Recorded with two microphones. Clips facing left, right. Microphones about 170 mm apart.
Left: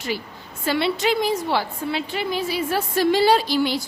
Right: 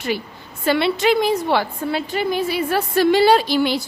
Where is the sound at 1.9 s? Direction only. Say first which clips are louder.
Right 4 dB; 45° right (ahead or behind).